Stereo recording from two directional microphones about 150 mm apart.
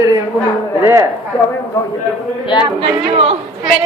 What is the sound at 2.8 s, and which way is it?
Speech, 40° right (ahead or behind).